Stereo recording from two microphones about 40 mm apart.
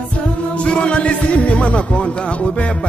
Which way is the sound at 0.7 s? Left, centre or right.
Left.